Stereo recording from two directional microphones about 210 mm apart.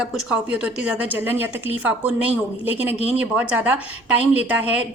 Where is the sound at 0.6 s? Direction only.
5° right (ahead or behind).